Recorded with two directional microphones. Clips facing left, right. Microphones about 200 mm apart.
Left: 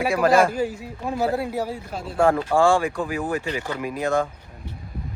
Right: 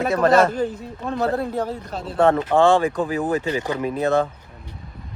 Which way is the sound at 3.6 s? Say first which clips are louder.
Right 4 dB; 20° right (ahead or behind).